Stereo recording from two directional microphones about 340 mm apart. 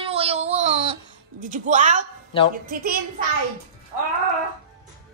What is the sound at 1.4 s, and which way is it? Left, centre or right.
Speech, right.